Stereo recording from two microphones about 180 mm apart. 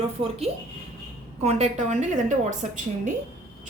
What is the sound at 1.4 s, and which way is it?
Speech, 40° right (ahead or behind).